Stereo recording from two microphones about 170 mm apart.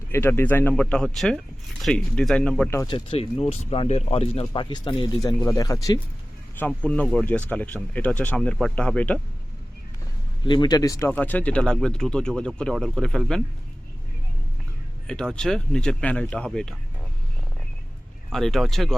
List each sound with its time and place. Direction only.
0.1 s speech: 15° left (ahead or behind)
2.6 s speech: 15° left (ahead or behind)
2.9 s speech: 35° left (ahead or behind)
6.6 s speech: 10° left (ahead or behind)
10.4 s speech: 25° left (ahead or behind); by 13.4 s 5° left (ahead or behind)
15.0 s speech: 5° left (ahead or behind)
18.3 s speech: centre (ahead or behind)